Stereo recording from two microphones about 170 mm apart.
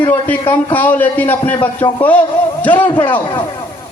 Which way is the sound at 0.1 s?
10° left (ahead or behind).